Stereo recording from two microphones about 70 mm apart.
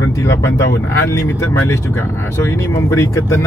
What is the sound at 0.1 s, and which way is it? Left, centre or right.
Speech, left.